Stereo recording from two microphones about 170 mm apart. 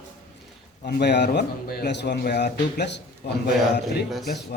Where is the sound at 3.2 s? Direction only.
70° left (ahead or behind).